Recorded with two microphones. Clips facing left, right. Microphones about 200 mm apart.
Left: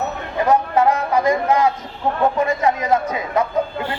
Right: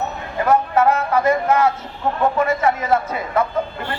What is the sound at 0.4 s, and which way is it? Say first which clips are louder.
A man's voice: even; 15° left (ahead or behind).